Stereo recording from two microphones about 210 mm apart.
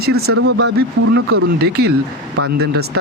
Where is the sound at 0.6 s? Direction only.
55° right (ahead or behind).